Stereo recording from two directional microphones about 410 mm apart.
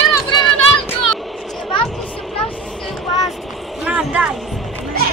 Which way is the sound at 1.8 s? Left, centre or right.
Centre.